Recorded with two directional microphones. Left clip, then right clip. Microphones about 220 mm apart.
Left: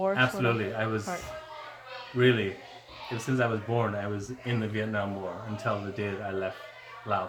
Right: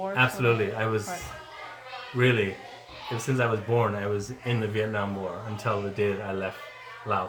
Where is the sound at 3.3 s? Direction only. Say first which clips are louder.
Right 3 dB; 5° left (ahead or behind).